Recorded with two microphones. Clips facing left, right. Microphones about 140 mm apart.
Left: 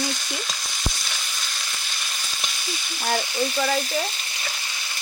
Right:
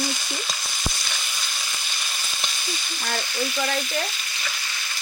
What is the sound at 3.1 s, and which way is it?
Frying, 15° left (ahead or behind).